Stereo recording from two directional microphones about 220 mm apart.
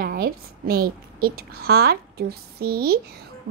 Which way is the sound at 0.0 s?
45° right (ahead or behind).